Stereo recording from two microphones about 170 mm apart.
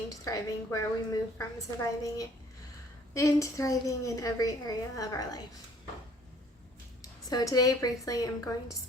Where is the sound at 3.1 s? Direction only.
20° left (ahead or behind).